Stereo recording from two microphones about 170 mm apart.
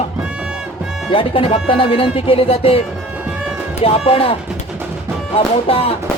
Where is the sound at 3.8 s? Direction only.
35° left (ahead or behind).